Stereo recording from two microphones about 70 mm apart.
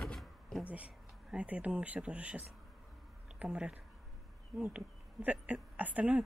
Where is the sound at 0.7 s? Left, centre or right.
Centre.